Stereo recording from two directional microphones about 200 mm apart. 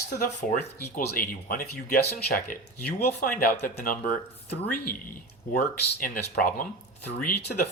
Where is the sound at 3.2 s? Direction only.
45° left (ahead or behind).